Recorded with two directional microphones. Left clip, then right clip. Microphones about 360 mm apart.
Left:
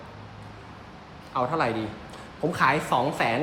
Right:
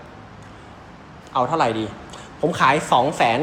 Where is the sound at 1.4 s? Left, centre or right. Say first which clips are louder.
Right 6 dB; centre.